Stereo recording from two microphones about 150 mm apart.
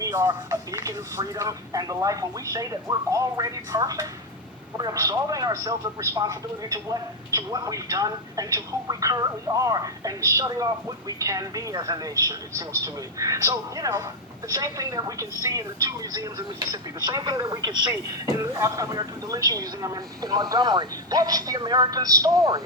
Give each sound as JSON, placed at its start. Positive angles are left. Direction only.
{"t": 0.0, "sound": "a man's voice", "side_deg": -25}